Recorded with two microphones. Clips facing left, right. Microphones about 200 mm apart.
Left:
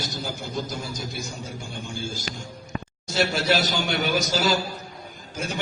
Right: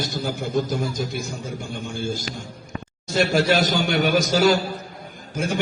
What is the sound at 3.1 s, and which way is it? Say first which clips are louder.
A man's voice: right 4 dB; 50° right (ahead or behind).